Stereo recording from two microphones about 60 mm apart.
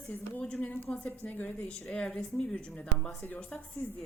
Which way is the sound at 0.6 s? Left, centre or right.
Left.